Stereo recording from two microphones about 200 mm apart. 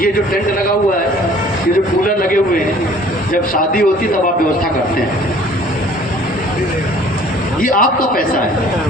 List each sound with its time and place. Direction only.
2.0 s a man's voice: 45° left (ahead or behind)
3.5 s a man's voice: 45° left (ahead or behind)
7.6 s a man's voice: 45° left (ahead or behind)